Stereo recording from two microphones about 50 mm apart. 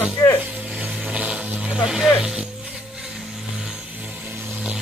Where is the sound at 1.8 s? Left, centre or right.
Centre.